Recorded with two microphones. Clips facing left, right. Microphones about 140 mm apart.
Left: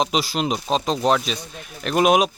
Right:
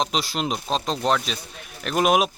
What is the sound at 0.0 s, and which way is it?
Speech, 5° left (ahead or behind).